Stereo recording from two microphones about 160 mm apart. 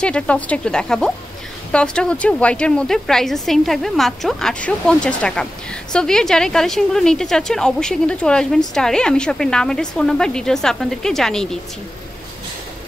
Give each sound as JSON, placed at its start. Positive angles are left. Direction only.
{"t": 0.0, "sound": "a woman's voice", "side_deg": 5}